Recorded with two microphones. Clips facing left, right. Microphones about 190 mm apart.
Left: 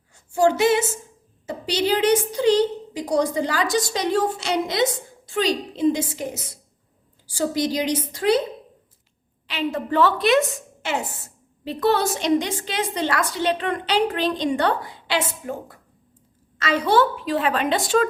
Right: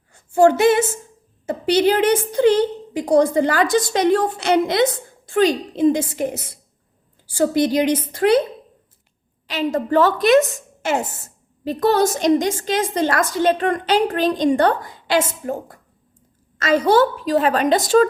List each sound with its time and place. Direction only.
0.1 s female singing: 55° right (ahead or behind)
1.5 s a woman's voice: 55° right (ahead or behind)
9.5 s a woman's voice: 40° right (ahead or behind)
16.6 s a woman's voice: 45° right (ahead or behind)